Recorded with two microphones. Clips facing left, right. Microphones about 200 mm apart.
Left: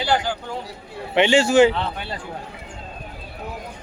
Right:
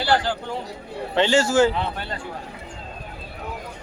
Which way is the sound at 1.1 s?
15° left (ahead or behind).